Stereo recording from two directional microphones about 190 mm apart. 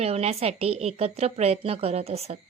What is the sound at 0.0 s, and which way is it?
A woman's voice, 35° right (ahead or behind).